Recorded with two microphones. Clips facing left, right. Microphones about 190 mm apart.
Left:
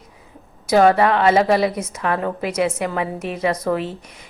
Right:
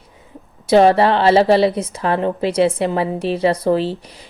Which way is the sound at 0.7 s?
30° right (ahead or behind).